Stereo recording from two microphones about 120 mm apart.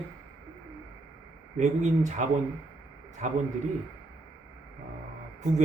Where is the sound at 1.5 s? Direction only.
80° right.